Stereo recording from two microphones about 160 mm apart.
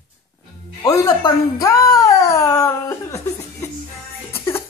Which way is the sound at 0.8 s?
20° left (ahead or behind).